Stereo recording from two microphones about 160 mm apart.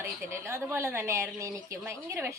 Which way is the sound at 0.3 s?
15° right (ahead or behind).